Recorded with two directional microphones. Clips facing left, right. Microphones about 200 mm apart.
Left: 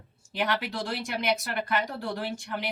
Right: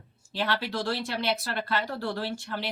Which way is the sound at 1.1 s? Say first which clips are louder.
Left 1 dB; 20° left (ahead or behind).